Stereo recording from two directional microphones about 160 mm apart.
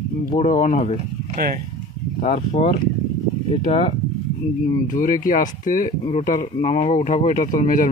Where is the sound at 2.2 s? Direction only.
40° left (ahead or behind).